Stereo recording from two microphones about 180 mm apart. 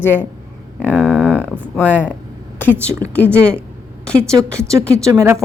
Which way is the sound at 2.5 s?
10° left (ahead or behind).